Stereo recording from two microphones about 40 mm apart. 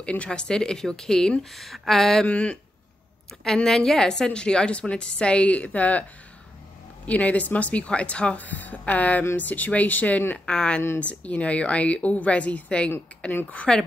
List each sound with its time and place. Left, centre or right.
0.0 s speech: left; by 1.3 s centre
1.4 s speech: centre
2.2 s a woman's voice: left
3.4 s a woman's voice: centre; by 6.0 s left
7.1 s a woman's voice: left
8.4 s a woman's voice: left
10.4 s a woman's voice: left
11.0 s a woman's voice: left; by 13.8 s centre